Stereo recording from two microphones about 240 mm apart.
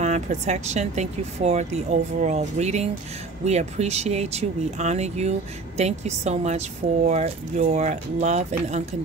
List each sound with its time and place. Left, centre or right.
0.0 s speech: right